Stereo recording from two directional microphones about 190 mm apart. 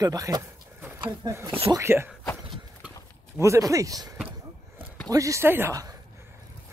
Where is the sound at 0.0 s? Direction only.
20° right (ahead or behind).